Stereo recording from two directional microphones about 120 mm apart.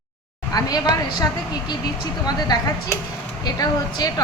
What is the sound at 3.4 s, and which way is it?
Speech, 35° left (ahead or behind).